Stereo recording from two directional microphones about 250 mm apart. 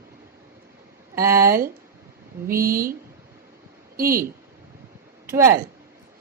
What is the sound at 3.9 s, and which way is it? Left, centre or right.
Speech, right.